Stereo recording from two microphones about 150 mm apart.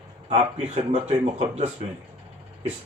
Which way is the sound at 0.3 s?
45° right (ahead or behind).